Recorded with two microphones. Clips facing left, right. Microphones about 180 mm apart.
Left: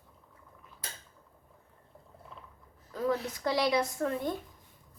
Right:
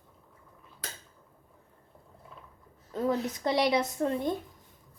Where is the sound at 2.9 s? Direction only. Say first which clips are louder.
Right 2 dB; 25° right (ahead or behind).